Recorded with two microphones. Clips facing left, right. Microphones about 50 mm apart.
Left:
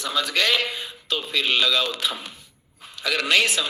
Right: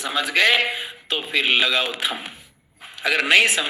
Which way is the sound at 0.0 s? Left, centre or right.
Centre.